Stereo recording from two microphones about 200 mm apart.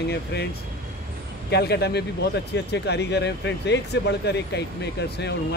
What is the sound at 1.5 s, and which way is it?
Speech, 55° left (ahead or behind).